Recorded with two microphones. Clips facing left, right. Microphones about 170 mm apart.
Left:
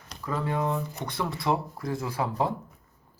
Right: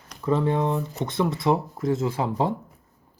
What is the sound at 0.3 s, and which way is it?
Speech, 25° right (ahead or behind).